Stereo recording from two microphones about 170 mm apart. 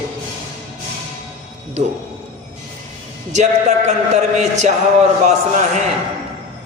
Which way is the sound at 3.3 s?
45° right (ahead or behind).